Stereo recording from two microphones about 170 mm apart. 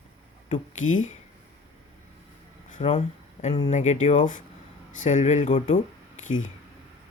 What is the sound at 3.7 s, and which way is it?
Speech, 45° left (ahead or behind).